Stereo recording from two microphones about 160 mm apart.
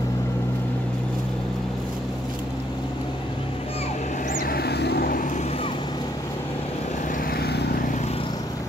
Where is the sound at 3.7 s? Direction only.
45° left (ahead or behind).